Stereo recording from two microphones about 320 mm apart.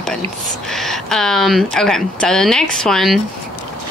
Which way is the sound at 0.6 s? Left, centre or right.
Centre.